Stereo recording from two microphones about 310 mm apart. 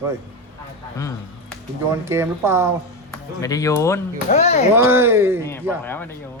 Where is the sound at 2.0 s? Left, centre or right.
Centre.